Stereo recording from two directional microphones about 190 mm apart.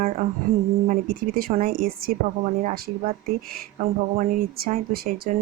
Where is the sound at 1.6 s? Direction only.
50° right (ahead or behind).